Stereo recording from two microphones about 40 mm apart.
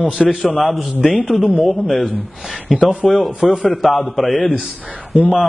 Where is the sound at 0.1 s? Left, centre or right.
Right.